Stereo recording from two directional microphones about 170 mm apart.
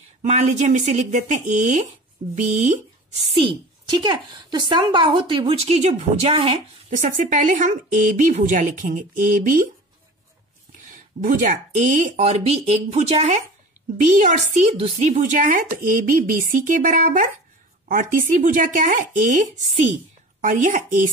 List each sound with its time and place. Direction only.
0.2 s a woman's voice: 45° right (ahead or behind)
11.1 s a woman's voice: 50° right (ahead or behind)